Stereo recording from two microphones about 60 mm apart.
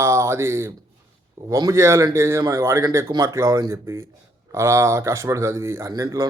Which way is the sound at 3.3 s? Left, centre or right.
Right.